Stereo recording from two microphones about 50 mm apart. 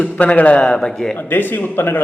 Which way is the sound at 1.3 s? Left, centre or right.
Left.